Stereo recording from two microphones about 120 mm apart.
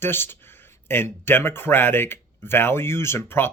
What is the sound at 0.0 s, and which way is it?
Speech, 20° left (ahead or behind).